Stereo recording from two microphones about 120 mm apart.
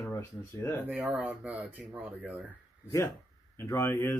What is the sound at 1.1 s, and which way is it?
Speech, 10° right (ahead or behind).